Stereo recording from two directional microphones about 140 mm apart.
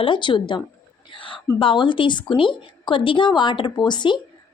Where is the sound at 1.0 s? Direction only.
35° left (ahead or behind).